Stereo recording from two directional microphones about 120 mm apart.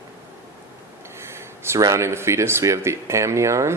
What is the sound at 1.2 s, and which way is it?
Speech, 20° right (ahead or behind).